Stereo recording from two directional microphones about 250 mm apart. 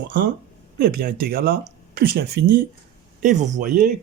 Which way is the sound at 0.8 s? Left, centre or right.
Right.